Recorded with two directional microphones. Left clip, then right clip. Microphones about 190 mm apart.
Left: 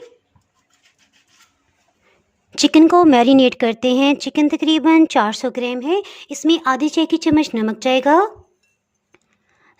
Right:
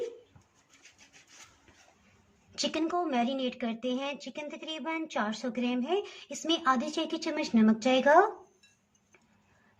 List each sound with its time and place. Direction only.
2.5 s speech: 60° left (ahead or behind)